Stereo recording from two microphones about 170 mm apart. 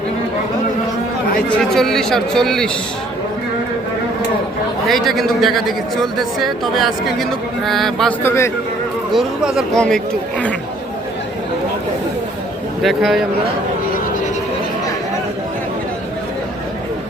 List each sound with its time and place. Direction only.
1.5 s a man's voice: centre (ahead or behind)
4.9 s a man's voice: centre (ahead or behind)
8.2 s a man's voice: 15° left (ahead or behind)
9.1 s a man's voice: 5° right (ahead or behind)
12.8 s a man's voice: centre (ahead or behind)